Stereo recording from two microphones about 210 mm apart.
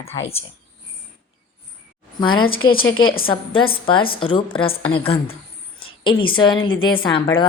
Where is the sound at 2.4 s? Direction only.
75° left (ahead or behind).